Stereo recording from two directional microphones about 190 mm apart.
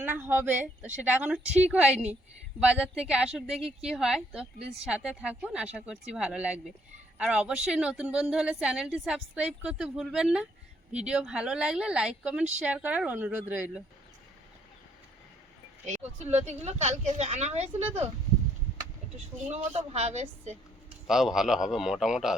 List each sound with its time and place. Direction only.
0.0 s a woman's voice: 10° right (ahead or behind)
15.9 s speech: 35° right (ahead or behind)
19.5 s speech: 35° right (ahead or behind)
21.1 s a woman's voice: centre (ahead or behind)